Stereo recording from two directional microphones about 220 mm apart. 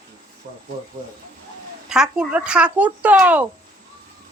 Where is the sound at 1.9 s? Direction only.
5° right (ahead or behind).